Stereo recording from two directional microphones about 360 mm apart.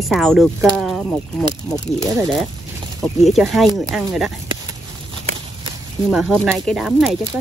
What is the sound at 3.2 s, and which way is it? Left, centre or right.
Speech, centre.